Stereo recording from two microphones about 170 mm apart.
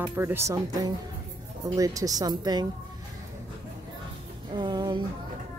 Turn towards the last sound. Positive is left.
turn(degrees=-25)  # may be behind; listen again after turning